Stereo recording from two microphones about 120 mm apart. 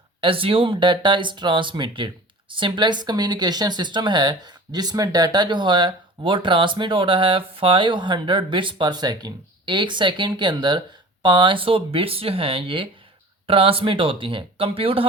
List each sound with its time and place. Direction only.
0.2 s speech: 50° right (ahead or behind)